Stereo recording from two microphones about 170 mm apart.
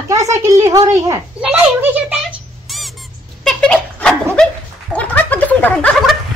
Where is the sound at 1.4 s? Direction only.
10° right (ahead or behind).